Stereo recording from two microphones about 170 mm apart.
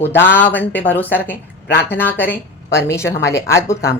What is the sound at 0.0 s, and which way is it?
A woman's voice, 10° left (ahead or behind).